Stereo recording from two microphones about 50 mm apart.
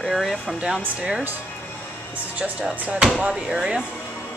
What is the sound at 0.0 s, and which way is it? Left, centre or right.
Speech, centre.